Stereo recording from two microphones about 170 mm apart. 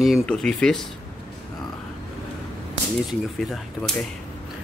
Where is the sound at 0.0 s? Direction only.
Centre (ahead or behind).